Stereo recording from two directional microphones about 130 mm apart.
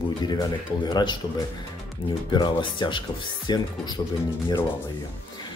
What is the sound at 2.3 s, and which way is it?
Speech, 35° left (ahead or behind).